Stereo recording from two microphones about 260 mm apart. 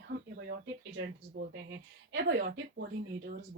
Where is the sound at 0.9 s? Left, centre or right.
Right.